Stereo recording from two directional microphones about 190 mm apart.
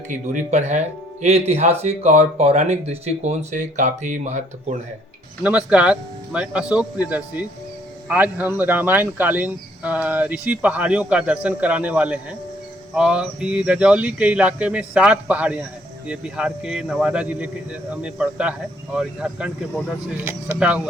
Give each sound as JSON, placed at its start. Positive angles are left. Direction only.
{"t": 0.1, "sound": "speech", "side_deg": -40}
{"t": 5.4, "sound": "speech", "side_deg": -5}